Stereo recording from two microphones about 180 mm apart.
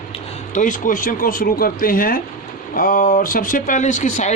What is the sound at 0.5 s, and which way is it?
Speech, 45° left (ahead or behind).